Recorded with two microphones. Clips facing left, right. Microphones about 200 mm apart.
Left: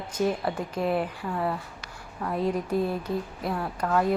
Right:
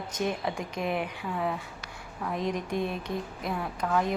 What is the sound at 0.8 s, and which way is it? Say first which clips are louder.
Speech: left 4 dB; 35° left (ahead or behind).